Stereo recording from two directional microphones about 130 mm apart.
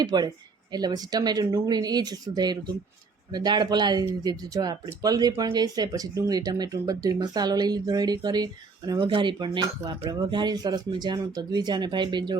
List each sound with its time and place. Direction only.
0.0 s speech: 30° right (ahead or behind)